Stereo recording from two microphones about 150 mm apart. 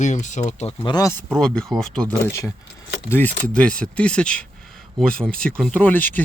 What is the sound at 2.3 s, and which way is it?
Speech, 20° left (ahead or behind).